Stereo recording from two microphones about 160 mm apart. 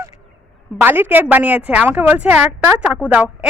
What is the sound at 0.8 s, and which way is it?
Speech, 10° right (ahead or behind).